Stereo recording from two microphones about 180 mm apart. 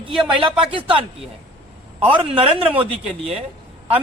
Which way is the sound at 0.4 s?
30° right (ahead or behind).